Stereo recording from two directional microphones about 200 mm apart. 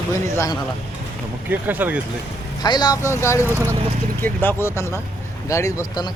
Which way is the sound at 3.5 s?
10° right (ahead or behind).